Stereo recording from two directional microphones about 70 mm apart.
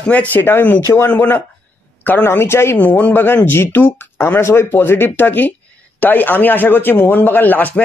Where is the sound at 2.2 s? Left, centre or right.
Left.